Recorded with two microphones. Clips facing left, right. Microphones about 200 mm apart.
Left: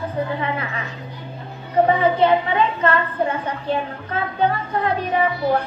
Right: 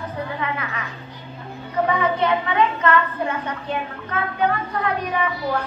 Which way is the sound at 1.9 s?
30° left (ahead or behind).